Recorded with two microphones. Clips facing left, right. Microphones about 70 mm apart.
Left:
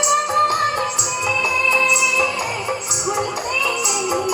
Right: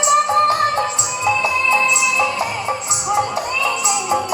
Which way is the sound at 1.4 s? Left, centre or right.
Right.